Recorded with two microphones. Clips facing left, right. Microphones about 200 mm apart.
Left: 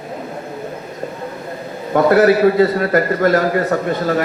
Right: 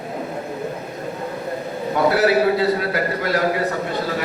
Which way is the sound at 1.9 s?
50° left (ahead or behind).